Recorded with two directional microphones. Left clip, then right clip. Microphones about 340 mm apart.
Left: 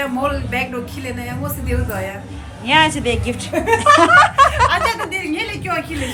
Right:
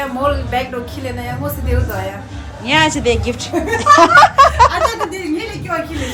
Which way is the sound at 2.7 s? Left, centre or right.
Centre.